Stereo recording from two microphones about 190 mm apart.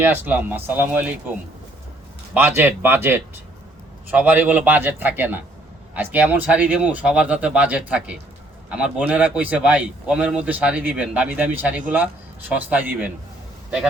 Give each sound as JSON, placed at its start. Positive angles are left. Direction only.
{"t": 0.0, "sound": "a man's voice", "side_deg": -10}
{"t": 2.3, "sound": "a man's voice", "side_deg": -10}